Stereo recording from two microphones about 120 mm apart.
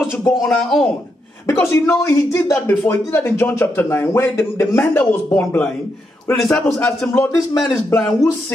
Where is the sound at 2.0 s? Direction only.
20° left (ahead or behind).